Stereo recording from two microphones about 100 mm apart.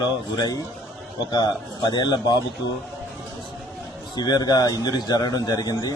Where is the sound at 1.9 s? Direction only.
45° left (ahead or behind).